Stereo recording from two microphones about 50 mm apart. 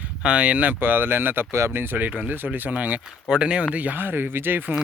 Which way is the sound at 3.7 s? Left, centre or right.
Right.